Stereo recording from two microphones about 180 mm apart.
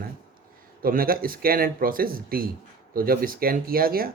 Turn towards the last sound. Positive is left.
turn(degrees=-55)  # may be behind; listen again after turning